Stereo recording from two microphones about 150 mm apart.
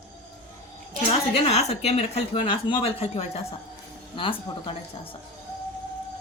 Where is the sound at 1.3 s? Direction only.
45° left (ahead or behind).